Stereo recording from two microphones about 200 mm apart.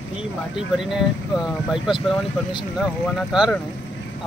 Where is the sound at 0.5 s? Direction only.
Centre (ahead or behind).